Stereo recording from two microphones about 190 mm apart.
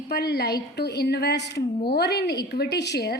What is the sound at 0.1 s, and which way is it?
A woman's voice, 60° left (ahead or behind).